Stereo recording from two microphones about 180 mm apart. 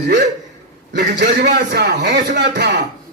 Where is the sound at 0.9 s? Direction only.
75° right (ahead or behind).